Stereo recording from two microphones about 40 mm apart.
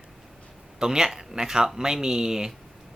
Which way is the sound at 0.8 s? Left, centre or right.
Centre.